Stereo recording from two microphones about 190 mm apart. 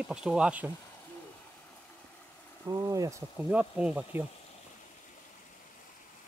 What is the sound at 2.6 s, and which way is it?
Speech, 20° right (ahead or behind).